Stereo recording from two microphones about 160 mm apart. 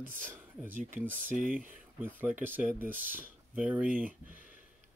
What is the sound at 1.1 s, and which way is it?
Speech, 55° right (ahead or behind).